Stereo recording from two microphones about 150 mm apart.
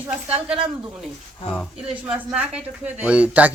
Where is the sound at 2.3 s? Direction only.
5° right (ahead or behind).